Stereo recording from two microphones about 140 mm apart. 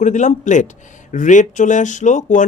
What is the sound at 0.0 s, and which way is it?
A man's voice, 60° left (ahead or behind).